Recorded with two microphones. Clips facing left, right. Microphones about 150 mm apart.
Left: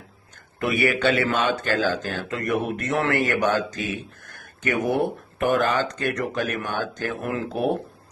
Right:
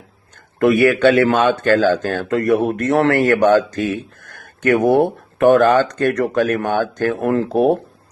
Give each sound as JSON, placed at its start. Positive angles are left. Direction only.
{"t": 0.6, "sound": "a man's voice", "side_deg": -50}
{"t": 3.2, "sound": "a man's voice", "side_deg": -55}